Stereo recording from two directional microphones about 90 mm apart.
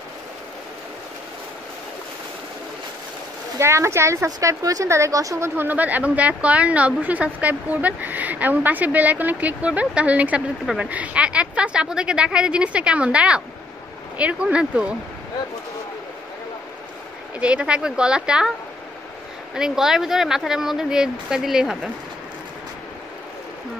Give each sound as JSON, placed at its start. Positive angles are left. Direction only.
{"t": 3.5, "sound": "a woman's voice", "side_deg": -30}
{"t": 5.6, "sound": "a woman's voice", "side_deg": -20}
{"t": 17.4, "sound": "a woman's voice", "side_deg": -10}
{"t": 19.5, "sound": "speech", "side_deg": -5}